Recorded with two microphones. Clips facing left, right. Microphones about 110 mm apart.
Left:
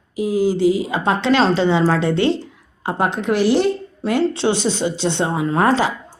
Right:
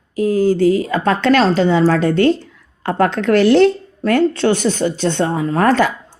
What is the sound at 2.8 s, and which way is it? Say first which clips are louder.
Speech: right 4 dB; 60° right (ahead or behind).